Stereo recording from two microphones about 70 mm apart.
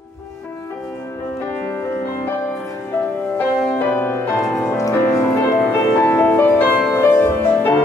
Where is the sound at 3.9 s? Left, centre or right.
Left.